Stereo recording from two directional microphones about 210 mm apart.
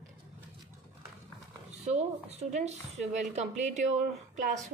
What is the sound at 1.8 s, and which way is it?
A woman's voice, 30° right (ahead or behind).